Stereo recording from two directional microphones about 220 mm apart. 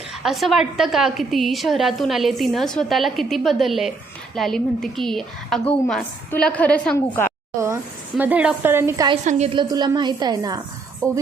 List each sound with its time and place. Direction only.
0.1 s a woman's voice: centre (ahead or behind)
8.2 s a woman's voice: 5° right (ahead or behind)
9.2 s a woman's voice: 25° right (ahead or behind)